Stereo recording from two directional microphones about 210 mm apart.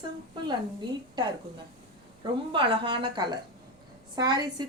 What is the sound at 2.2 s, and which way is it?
A woman's voice, 25° right (ahead or behind).